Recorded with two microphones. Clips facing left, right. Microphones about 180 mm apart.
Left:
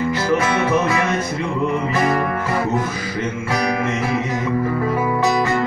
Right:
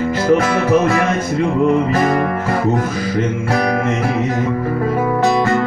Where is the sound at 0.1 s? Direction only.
55° right (ahead or behind).